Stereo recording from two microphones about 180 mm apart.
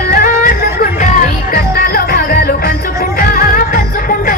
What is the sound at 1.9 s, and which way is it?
Music, 55° left (ahead or behind).